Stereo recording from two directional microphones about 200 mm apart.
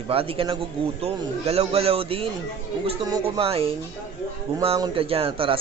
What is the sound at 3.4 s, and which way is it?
Speech, 30° right (ahead or behind).